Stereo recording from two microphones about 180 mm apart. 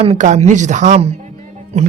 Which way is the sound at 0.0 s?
40° right (ahead or behind).